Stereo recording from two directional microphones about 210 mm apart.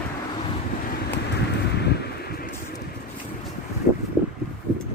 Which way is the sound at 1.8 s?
50° left (ahead or behind).